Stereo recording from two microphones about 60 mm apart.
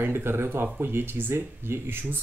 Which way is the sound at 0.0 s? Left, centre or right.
Right.